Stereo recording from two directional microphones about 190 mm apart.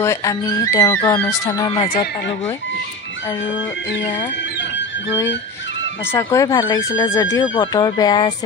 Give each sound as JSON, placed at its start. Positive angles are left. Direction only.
{"t": 0.0, "sound": "speech", "side_deg": 15}
{"t": 6.1, "sound": "speech", "side_deg": 15}